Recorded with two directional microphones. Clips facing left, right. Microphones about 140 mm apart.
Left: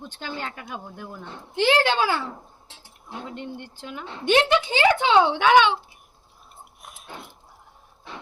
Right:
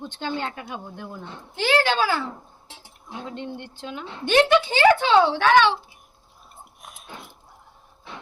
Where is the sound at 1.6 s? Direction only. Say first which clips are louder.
Left 1 dB; 20° left (ahead or behind).